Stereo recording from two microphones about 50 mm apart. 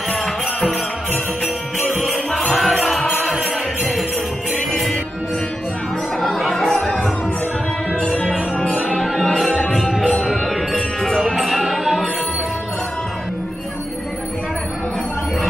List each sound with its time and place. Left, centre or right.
2.3 s music: centre
4.6 s music: centre
6.2 s music: centre
8.5 s music: centre